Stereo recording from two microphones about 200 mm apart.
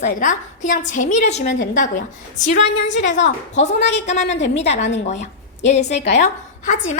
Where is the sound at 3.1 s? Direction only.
35° left (ahead or behind).